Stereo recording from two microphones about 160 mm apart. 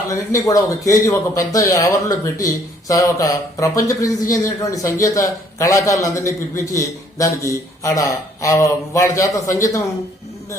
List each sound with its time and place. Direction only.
0.1 s speech: 20° left (ahead or behind)